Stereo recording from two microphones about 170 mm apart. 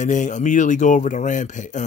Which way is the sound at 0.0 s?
45° left (ahead or behind).